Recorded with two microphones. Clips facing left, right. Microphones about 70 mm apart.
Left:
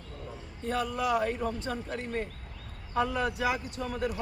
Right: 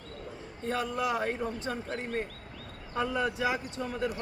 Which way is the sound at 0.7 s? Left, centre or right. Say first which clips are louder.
Left 2 dB; right.